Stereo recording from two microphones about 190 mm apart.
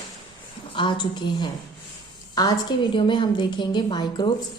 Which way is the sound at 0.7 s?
25° left (ahead or behind).